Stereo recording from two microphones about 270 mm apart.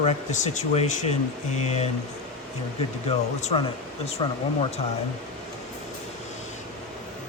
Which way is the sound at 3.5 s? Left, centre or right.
Left.